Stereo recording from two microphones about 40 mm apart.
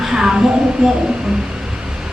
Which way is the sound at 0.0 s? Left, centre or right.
Centre.